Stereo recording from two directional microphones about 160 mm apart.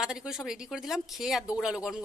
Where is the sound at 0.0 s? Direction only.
5° right (ahead or behind).